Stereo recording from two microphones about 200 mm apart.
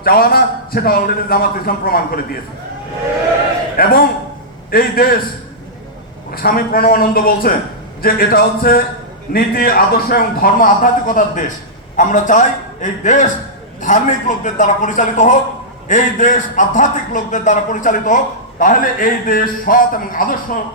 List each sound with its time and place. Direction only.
0.0 s a man's voice: 50° left (ahead or behind)
3.8 s a man's voice: 50° left (ahead or behind)
6.3 s a man's voice: 50° left (ahead or behind)